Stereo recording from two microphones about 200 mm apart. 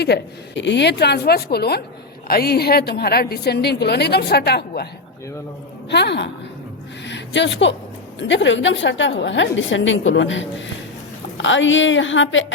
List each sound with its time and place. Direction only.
0.0 s a woman's voice: 60° left (ahead or behind)
5.9 s a woman's voice: 55° left (ahead or behind)
7.0 s a sound: 60° left (ahead or behind)
8.2 s a woman's voice: 65° left (ahead or behind)